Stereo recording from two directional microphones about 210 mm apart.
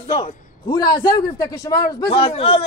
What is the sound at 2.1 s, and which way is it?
Speech, 30° left (ahead or behind).